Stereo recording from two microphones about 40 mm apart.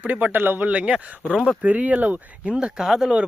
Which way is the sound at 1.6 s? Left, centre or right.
Right.